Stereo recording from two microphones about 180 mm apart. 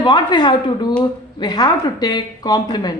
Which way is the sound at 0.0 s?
25° left (ahead or behind).